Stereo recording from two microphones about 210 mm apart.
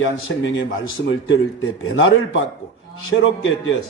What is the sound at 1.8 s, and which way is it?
A man's voice, 65° left (ahead or behind).